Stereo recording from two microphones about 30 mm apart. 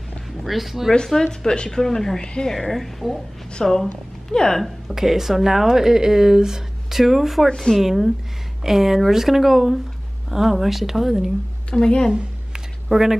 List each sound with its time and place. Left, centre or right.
0.4 s speech: centre
1.0 s speech: centre
2.2 s a woman's voice: left
2.7 s a woman's voice: centre; by 4.6 s left
4.8 s speech: centre
7.0 s speech: centre
7.4 s a woman's voice: centre
7.8 s speech: centre
11.7 s a woman's voice: left
12.8 s speech: centre